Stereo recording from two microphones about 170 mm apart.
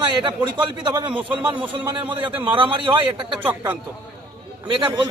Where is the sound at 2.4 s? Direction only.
30° right (ahead or behind).